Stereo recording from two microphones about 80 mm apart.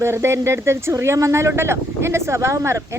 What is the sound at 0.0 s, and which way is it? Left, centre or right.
Speech, right.